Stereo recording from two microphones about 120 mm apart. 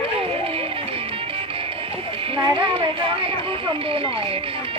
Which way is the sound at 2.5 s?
45° right (ahead or behind).